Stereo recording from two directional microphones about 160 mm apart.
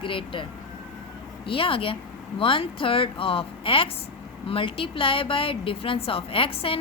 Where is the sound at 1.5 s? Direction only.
35° left (ahead or behind).